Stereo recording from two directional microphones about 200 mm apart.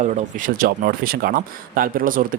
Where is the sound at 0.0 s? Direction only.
40° right (ahead or behind).